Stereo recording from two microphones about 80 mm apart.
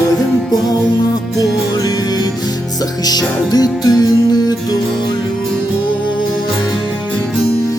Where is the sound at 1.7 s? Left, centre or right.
Left.